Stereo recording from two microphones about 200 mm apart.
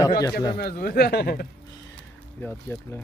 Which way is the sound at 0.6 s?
50° left (ahead or behind).